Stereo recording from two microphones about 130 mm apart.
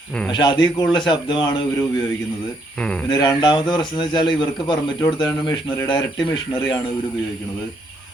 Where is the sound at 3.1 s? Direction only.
35° left (ahead or behind).